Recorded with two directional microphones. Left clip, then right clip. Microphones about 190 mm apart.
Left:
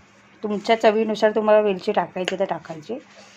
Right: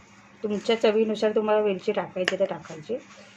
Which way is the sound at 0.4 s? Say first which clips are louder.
Left 4 dB; 40° left (ahead or behind).